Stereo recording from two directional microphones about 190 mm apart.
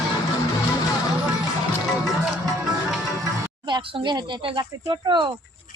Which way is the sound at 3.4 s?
25° right (ahead or behind).